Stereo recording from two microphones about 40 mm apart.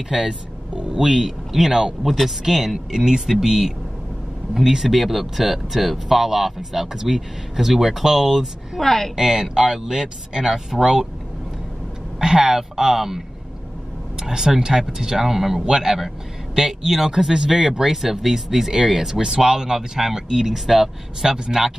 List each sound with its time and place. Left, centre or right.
0.1 s speech: centre
2.0 s speech: centre
8.8 s speech: centre
9.1 s speech: centre
12.2 s speech: centre
14.2 s speech: centre